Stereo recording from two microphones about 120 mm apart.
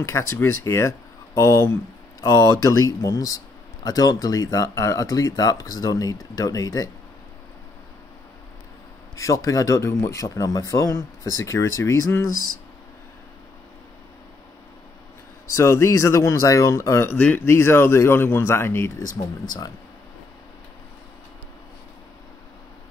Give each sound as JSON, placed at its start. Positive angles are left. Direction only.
{"t": 0.0, "sound": "speech", "side_deg": 20}
{"t": 9.1, "sound": "speech", "side_deg": 25}
{"t": 15.5, "sound": "speech", "side_deg": 25}